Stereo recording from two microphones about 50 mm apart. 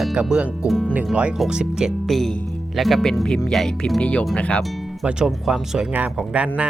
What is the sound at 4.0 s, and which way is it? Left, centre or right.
Speech, left.